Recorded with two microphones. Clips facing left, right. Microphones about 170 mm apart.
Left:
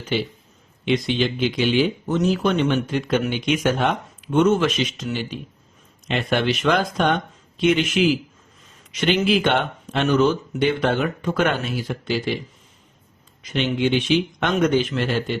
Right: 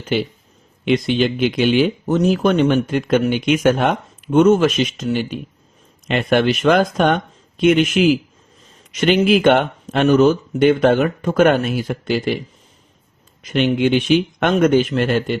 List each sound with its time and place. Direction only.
0.9 s speech: 50° right (ahead or behind)
13.4 s speech: 50° right (ahead or behind)